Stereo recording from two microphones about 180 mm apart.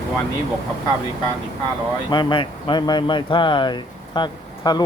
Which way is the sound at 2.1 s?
25° left (ahead or behind).